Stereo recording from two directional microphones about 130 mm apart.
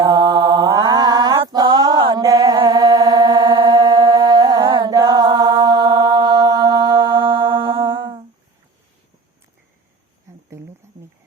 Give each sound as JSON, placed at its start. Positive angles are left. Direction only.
{"t": 0.0, "sound": "mantra", "side_deg": -30}
{"t": 1.5, "sound": "a sound", "side_deg": -30}
{"t": 2.6, "sound": "music", "side_deg": -30}
{"t": 10.8, "sound": "music", "side_deg": -20}